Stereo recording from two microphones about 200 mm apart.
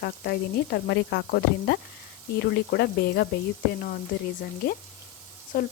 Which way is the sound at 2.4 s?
55° left (ahead or behind).